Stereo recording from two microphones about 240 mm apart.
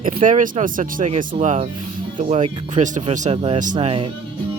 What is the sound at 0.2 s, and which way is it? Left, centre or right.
Speech, right.